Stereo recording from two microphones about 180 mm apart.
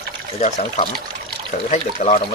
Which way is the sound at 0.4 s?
40° left (ahead or behind).